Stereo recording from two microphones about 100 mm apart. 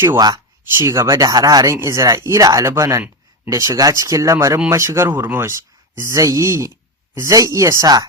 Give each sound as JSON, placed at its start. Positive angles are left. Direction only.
{"t": 0.8, "sound": "speech", "side_deg": -30}